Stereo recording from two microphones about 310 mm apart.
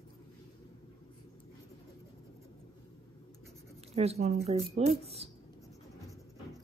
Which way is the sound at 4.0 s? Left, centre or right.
Right.